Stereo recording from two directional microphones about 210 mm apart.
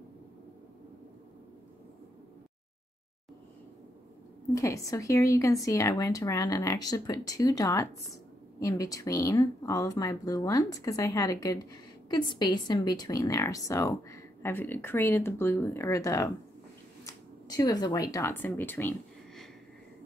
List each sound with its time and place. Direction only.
4.6 s speech: 15° left (ahead or behind)